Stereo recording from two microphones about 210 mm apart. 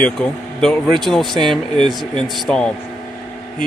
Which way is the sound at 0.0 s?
5° left (ahead or behind).